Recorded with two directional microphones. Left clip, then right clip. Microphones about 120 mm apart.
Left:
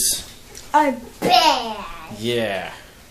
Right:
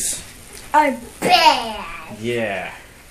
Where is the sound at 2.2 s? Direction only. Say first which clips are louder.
Even; 10° left (ahead or behind).